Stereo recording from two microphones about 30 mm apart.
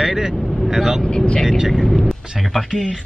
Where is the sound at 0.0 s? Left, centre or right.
Centre.